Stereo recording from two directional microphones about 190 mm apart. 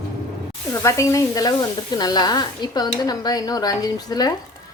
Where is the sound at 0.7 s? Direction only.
15° left (ahead or behind).